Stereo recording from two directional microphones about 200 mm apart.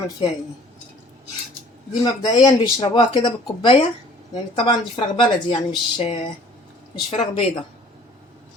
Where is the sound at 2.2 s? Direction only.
20° left (ahead or behind).